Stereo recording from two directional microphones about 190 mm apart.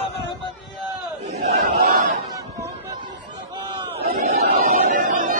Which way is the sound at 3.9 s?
50° right (ahead or behind).